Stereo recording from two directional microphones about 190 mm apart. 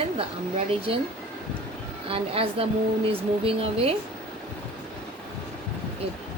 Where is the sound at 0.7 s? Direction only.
30° right (ahead or behind).